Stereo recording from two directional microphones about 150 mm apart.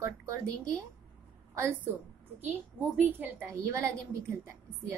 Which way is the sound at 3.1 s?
15° right (ahead or behind).